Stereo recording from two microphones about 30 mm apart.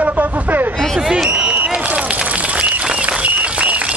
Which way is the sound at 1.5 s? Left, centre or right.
Right.